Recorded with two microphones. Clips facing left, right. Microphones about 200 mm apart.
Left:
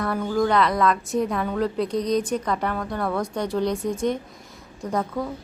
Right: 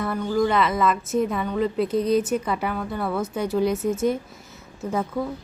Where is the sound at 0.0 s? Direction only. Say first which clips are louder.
Even; centre (ahead or behind).